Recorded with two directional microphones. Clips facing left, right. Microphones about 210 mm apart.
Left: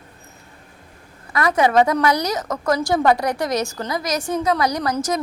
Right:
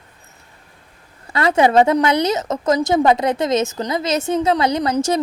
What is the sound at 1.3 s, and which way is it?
A woman's voice, 25° right (ahead or behind).